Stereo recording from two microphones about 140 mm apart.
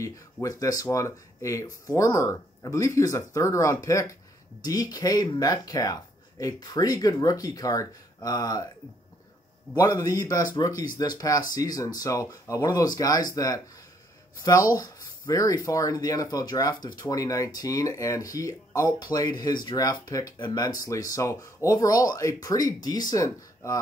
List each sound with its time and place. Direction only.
0.0 s speech: 25° left (ahead or behind)
9.8 s speech: 25° left (ahead or behind)